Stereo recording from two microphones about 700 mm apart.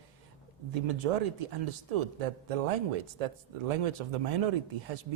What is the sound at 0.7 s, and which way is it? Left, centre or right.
A man's voice, right.